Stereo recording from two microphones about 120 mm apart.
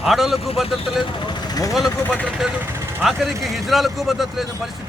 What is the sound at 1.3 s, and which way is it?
Vehicle, 30° left (ahead or behind).